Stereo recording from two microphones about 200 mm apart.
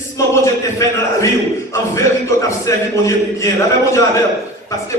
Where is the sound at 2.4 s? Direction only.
15° left (ahead or behind).